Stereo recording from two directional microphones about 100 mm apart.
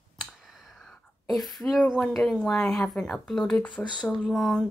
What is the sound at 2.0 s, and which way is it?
Speech, 10° left (ahead or behind).